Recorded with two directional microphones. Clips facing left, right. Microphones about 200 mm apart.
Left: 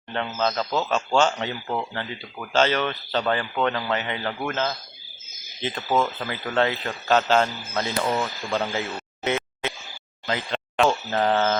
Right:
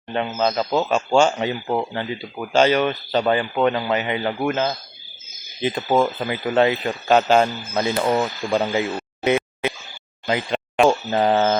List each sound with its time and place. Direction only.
0.3 s a man's voice: 15° right (ahead or behind)
9.2 s a sound: 15° right (ahead or behind)
10.2 s a man's voice: 15° right (ahead or behind)